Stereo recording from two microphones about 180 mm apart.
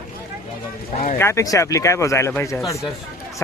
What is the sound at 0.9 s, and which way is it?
Speech, 45° left (ahead or behind).